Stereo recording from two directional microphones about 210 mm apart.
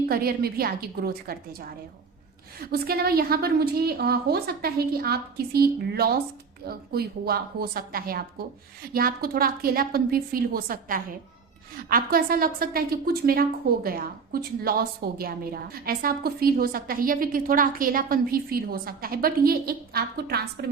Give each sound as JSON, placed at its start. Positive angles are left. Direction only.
{"t": 0.1, "sound": "a woman's voice", "side_deg": -45}